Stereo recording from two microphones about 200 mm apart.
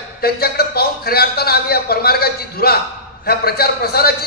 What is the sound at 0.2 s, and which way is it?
A man's voice, 50° left (ahead or behind).